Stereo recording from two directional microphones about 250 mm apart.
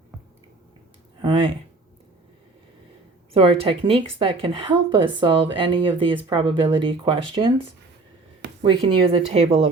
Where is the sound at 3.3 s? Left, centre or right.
Right.